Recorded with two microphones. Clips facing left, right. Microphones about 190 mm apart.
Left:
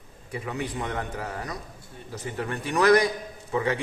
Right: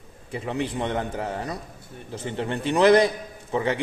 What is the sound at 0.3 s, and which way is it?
A man's voice, 25° right (ahead or behind).